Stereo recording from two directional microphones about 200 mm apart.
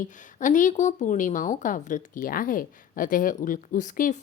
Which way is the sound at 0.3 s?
40° left (ahead or behind).